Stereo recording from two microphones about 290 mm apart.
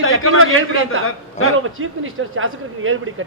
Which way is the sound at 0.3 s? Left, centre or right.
Right.